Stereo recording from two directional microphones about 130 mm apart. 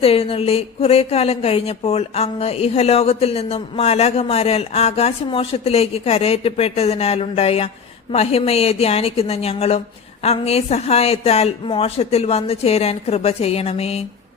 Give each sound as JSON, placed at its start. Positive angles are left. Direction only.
{"t": 0.0, "sound": "speech", "side_deg": 45}